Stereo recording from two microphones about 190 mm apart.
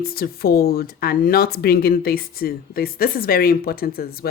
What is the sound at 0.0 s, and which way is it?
Speech, 50° left (ahead or behind).